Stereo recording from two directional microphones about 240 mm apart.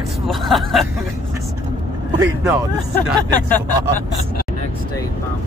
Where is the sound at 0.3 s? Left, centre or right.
Centre.